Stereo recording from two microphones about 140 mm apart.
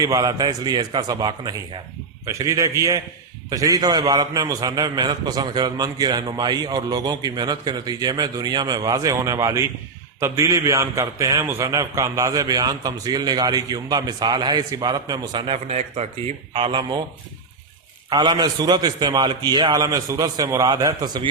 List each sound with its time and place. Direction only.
0.0 s a man's voice: 25° right (ahead or behind); by 16.0 s 50° right (ahead or behind)
16.5 s speech: 35° right (ahead or behind)
18.1 s a man's voice: 30° right (ahead or behind)